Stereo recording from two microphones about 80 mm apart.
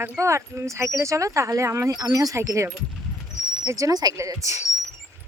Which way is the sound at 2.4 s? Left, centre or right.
Right.